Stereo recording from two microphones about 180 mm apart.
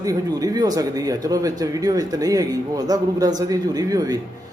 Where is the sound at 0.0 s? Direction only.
20° right (ahead or behind).